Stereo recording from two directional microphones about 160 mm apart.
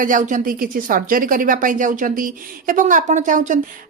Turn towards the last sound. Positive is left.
turn(degrees=-50)  # may be behind; listen again after turning